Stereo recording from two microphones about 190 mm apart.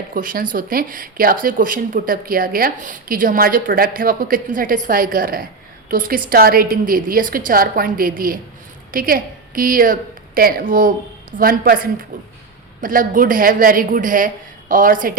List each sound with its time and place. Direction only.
0.1 s a woman's voice: 45° right (ahead or behind)